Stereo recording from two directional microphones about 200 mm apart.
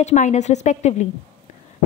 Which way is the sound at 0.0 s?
35° left (ahead or behind).